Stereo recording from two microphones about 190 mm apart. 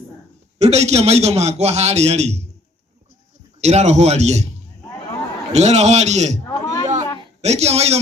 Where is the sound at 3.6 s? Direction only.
35° right (ahead or behind).